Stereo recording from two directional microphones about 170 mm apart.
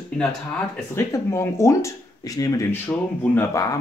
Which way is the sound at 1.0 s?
15° left (ahead or behind).